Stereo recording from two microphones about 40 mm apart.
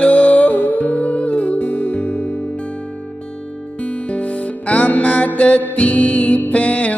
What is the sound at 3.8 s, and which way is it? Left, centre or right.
Music, left.